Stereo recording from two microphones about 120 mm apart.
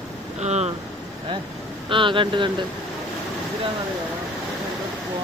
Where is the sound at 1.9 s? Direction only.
45° right (ahead or behind).